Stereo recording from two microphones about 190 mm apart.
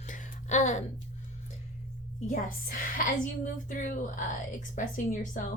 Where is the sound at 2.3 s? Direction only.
45° left (ahead or behind).